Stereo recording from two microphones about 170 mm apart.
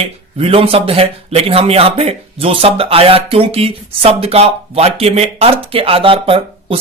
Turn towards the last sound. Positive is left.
turn(degrees=-35)  # may be behind; listen again after turning